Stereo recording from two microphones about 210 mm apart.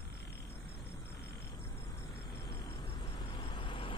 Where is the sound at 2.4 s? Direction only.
25° left (ahead or behind).